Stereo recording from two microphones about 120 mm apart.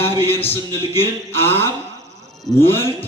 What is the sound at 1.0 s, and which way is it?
Music, 20° left (ahead or behind).